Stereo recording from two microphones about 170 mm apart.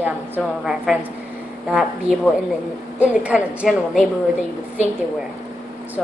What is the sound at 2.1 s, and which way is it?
Speech, 40° right (ahead or behind).